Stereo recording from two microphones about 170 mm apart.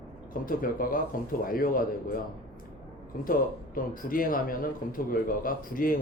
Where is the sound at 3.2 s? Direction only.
55° left (ahead or behind).